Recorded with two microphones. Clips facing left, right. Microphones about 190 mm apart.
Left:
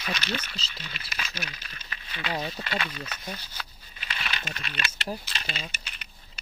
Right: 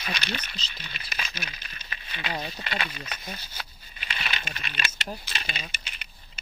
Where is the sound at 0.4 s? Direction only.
20° right (ahead or behind).